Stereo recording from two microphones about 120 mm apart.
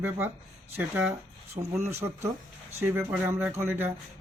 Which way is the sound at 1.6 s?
40° right (ahead or behind).